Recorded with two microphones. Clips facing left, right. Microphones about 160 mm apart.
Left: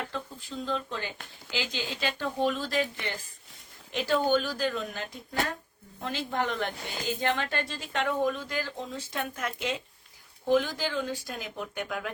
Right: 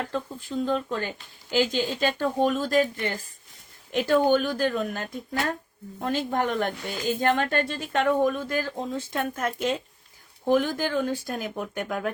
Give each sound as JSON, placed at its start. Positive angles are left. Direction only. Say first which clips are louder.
{"t": 0.0, "sound": "speech", "louder": "right 6 dB", "side_deg": -50}